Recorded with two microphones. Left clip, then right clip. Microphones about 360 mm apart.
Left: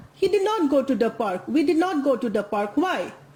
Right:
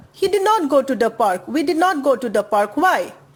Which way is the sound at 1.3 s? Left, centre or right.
Right.